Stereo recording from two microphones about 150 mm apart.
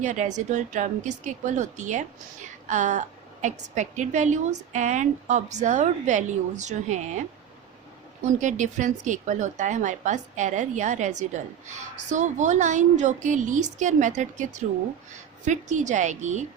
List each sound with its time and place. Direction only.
0.0 s a woman's voice: 55° right (ahead or behind)
8.4 s a woman's voice: 55° right (ahead or behind)